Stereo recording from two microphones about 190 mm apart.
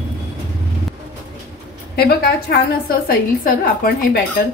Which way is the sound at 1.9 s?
55° left (ahead or behind).